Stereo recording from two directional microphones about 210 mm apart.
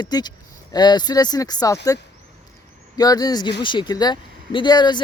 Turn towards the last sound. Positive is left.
turn(degrees=20)  # may be behind; listen again after turning